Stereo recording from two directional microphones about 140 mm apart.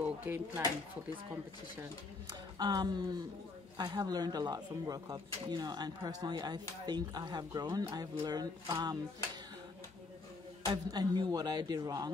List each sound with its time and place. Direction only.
0.0 s a sound: 15° right (ahead or behind)
2.2 s speech: 30° right (ahead or behind)
10.6 s speech: 30° right (ahead or behind)